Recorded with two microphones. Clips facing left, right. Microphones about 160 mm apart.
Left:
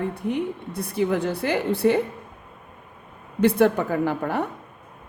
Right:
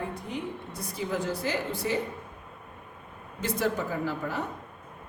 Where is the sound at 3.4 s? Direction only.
60° left (ahead or behind).